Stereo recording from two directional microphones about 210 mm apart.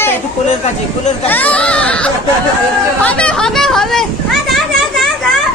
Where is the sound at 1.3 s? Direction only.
5° left (ahead or behind).